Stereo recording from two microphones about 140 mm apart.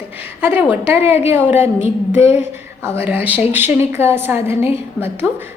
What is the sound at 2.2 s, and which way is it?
Speech, 50° left (ahead or behind).